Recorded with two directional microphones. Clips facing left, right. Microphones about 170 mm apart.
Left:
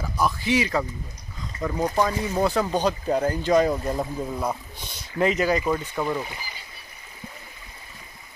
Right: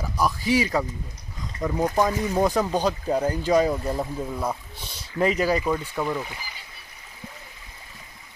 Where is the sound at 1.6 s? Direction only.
5° right (ahead or behind).